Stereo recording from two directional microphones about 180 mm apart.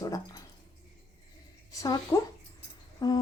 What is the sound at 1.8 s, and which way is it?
Speech, 20° left (ahead or behind).